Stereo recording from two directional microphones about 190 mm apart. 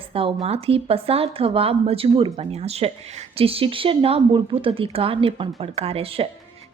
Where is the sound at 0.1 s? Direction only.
30° right (ahead or behind).